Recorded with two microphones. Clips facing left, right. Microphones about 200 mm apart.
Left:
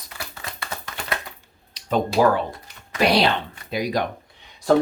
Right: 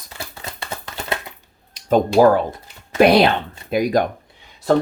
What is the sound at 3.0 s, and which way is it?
Speech, 55° right (ahead or behind).